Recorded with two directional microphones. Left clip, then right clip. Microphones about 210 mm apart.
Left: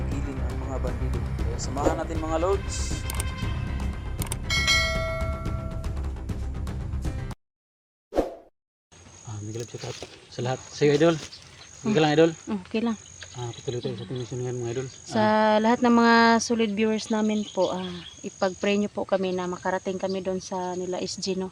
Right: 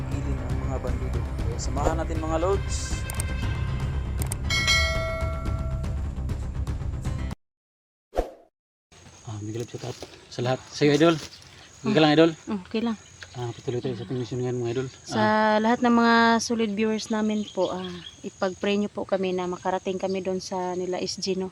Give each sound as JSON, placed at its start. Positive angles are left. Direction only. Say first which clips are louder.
{"t": 0.1, "sound": "speech", "louder": "even", "side_deg": 0}
{"t": 4.2, "sound": "bell", "louder": "even", "side_deg": 0}
{"t": 8.1, "sound": "plop", "louder": "left 3 dB", "side_deg": 0}
{"t": 10.3, "sound": "speech", "louder": "right 3 dB", "side_deg": -60}
{"t": 12.5, "sound": "speech", "louder": "even", "side_deg": 0}
{"t": 13.3, "sound": "speech", "louder": "right 2 dB", "side_deg": -55}
{"t": 15.0, "sound": "speech", "louder": "left 1 dB", "side_deg": 5}